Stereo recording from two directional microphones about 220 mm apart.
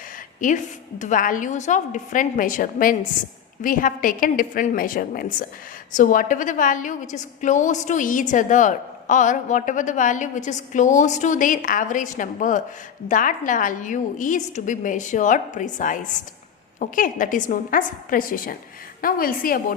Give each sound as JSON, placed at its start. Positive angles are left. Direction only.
{"t": 0.4, "sound": "a woman's voice", "side_deg": 35}